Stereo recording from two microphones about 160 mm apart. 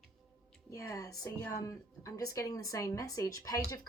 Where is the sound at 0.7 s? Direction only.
20° left (ahead or behind).